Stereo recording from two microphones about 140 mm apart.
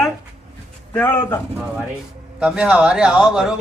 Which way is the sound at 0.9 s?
15° left (ahead or behind).